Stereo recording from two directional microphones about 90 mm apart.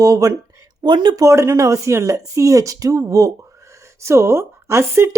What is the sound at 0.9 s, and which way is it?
Speech, 60° right (ahead or behind).